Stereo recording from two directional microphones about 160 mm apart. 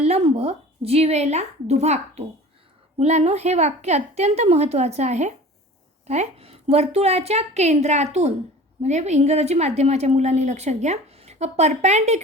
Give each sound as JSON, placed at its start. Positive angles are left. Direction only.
{"t": 0.0, "sound": "a woman's voice", "side_deg": -40}